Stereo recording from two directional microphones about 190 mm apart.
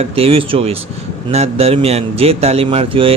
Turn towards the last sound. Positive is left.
turn(degrees=-30)  # may be behind; listen again after turning